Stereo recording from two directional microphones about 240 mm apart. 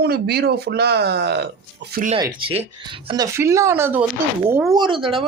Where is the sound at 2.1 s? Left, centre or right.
Centre.